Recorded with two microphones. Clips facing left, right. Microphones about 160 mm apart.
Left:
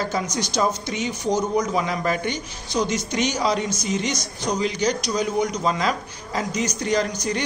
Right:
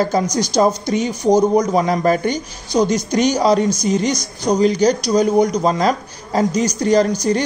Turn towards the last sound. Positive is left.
turn(degrees=-35)  # may be behind; listen again after turning